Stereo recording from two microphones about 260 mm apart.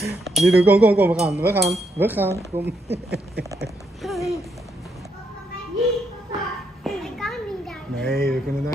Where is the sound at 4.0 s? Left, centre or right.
Centre.